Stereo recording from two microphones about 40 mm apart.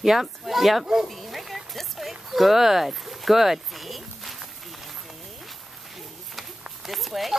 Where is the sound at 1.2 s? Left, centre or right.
Centre.